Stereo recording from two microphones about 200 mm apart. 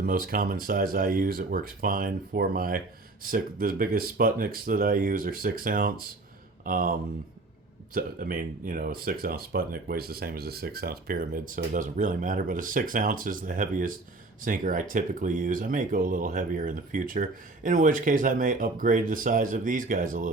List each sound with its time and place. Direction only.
0.0 s speech: 45° right (ahead or behind)
7.9 s speech: 45° right (ahead or behind)